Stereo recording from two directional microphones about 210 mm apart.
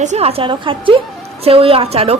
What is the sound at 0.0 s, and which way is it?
A woman's voice, 30° right (ahead or behind).